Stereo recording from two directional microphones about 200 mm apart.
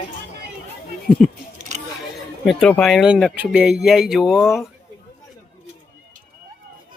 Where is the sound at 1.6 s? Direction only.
35° right (ahead or behind).